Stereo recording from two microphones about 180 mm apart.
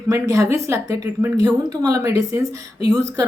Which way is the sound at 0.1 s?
15° right (ahead or behind).